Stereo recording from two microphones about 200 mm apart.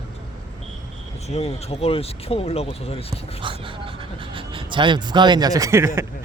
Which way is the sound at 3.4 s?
25° right (ahead or behind).